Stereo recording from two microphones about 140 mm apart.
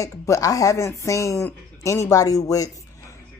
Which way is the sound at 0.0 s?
20° left (ahead or behind).